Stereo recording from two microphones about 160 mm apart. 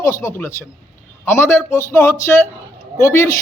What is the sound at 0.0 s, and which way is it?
A man's voice, 20° left (ahead or behind).